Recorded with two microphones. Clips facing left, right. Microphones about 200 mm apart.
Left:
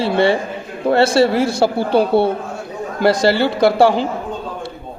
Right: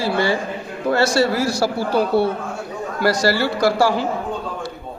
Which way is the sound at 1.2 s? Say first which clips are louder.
Left 4 dB; 25° left (ahead or behind).